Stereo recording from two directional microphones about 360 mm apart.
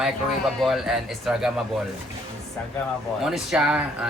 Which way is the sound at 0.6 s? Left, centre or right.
Centre.